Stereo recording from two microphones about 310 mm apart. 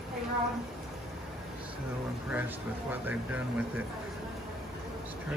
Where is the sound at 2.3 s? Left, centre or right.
Centre.